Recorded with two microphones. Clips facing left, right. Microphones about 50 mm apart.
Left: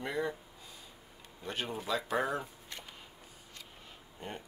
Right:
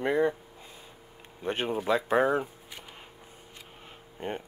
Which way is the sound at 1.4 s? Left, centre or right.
Right.